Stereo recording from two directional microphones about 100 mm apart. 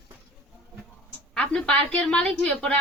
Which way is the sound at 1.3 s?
10° left (ahead or behind).